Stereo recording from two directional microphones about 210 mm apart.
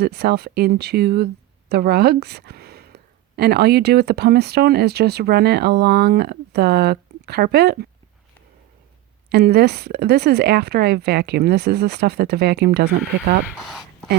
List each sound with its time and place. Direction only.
0.0 s a woman's voice: 50° right (ahead or behind)
9.3 s a woman's voice: 50° right (ahead or behind)
13.5 s a sound: centre (ahead or behind)